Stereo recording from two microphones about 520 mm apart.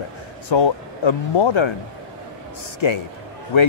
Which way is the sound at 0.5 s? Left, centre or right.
Left.